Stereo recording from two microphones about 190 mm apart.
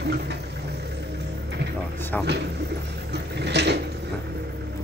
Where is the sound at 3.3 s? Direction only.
65° right (ahead or behind).